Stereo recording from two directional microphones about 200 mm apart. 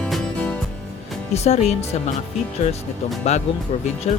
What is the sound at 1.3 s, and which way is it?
Speech, 35° left (ahead or behind).